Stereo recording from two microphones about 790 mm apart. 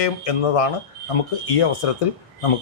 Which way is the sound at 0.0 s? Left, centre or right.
Left.